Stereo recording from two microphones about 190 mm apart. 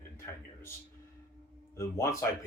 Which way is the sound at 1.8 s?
15° left (ahead or behind).